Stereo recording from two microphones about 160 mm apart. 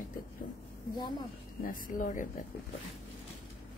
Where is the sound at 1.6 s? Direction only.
60° left (ahead or behind).